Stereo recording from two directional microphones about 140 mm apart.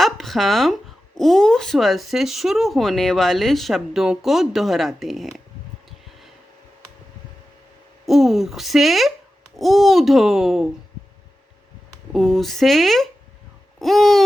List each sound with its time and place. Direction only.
0.0 s speech: centre (ahead or behind)
8.0 s speech: centre (ahead or behind)
12.1 s speech: centre (ahead or behind)